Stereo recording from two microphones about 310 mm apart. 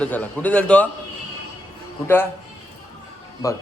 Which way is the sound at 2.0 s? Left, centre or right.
Centre.